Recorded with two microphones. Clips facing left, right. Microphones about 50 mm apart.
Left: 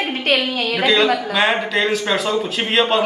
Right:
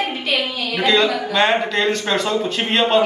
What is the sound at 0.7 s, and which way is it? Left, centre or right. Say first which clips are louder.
A man's voice: left 1 dB; centre.